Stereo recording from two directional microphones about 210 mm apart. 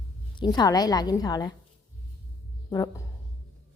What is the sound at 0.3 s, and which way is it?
A woman's voice, 20° left (ahead or behind).